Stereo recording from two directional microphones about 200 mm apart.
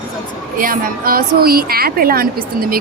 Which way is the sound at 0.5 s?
45° right (ahead or behind).